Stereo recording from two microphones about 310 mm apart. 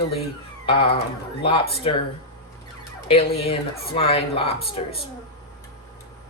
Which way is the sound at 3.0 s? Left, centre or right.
Centre.